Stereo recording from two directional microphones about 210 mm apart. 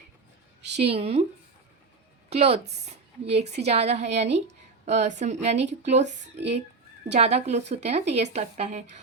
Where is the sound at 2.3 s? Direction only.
30° right (ahead or behind).